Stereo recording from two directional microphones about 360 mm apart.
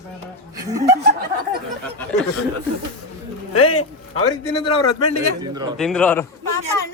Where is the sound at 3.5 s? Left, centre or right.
Left.